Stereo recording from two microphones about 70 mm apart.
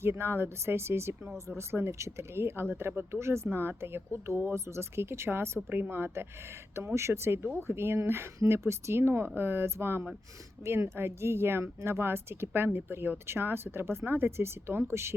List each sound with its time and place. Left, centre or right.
0.0 s speech: right